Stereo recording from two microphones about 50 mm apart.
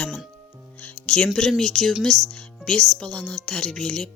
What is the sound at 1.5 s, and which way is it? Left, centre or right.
Speech, centre.